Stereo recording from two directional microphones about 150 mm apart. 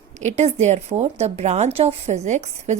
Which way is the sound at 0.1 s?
50° right (ahead or behind).